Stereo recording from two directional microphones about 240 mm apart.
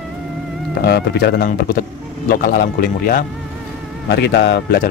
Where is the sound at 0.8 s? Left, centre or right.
Left.